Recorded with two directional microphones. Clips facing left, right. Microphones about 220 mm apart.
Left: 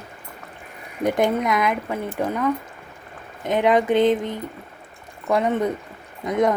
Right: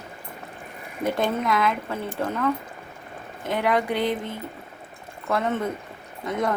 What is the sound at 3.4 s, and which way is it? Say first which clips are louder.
Speech: left 5 dB; 20° left (ahead or behind).